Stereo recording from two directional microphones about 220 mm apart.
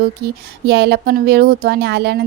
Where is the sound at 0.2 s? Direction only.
45° right (ahead or behind).